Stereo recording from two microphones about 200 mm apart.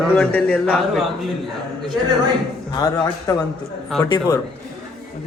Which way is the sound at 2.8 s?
20° left (ahead or behind).